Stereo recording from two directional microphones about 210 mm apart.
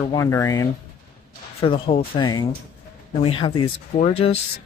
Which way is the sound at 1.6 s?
25° left (ahead or behind).